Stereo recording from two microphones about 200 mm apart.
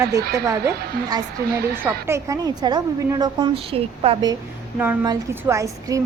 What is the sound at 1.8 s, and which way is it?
A woman's voice, 15° right (ahead or behind).